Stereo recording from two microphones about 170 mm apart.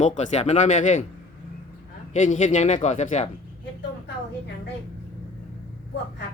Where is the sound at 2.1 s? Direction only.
45° left (ahead or behind).